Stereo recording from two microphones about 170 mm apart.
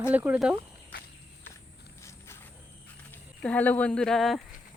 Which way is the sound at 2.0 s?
15° left (ahead or behind).